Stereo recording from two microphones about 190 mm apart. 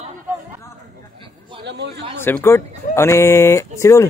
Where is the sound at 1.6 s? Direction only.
65° right (ahead or behind).